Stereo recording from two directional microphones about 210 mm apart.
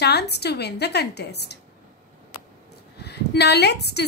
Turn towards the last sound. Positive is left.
turn(degrees=50)  # may be behind; listen again after turning